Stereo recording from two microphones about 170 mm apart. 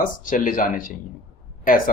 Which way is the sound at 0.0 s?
50° left (ahead or behind).